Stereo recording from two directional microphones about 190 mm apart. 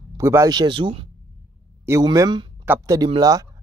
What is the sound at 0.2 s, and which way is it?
Speech, 15° right (ahead or behind).